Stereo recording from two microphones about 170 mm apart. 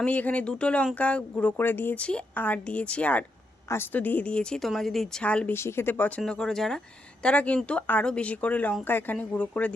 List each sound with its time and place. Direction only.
0.0 s a woman's voice: 10° left (ahead or behind)